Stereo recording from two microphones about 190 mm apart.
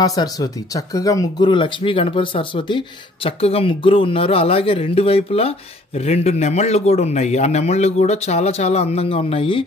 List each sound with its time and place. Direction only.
0.0 s speech: 20° left (ahead or behind)